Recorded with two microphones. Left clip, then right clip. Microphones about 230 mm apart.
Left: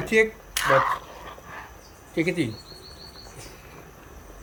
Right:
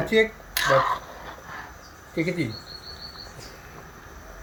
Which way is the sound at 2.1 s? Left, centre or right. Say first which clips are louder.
Left 2 dB; centre.